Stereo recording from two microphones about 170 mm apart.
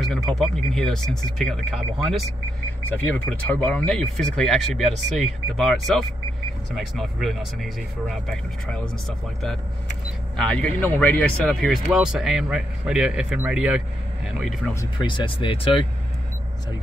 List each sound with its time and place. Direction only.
0.1 s a man's voice: centre (ahead or behind)
10.3 s a man's voice: 5° left (ahead or behind)
15.0 s speech: 30° left (ahead or behind)